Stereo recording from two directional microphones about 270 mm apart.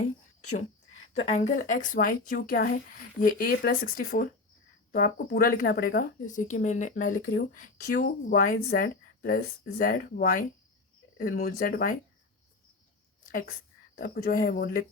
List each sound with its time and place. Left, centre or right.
1.2 s a woman's voice: left
14.3 s speech: left